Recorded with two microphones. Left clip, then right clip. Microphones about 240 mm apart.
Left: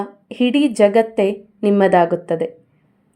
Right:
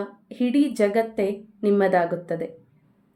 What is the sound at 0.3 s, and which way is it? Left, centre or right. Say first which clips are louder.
A woman's voice: left 6 dB; left.